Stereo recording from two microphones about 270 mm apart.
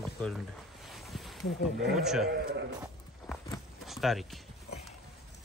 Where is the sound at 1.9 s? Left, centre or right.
Centre.